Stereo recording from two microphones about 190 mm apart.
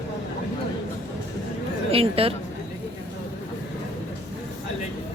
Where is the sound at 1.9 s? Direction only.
30° right (ahead or behind).